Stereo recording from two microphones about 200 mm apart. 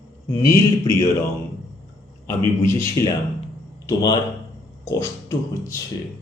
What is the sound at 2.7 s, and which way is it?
Speech, 15° left (ahead or behind).